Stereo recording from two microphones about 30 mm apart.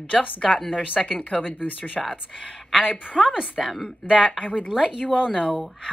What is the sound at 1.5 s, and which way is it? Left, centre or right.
Speech, left.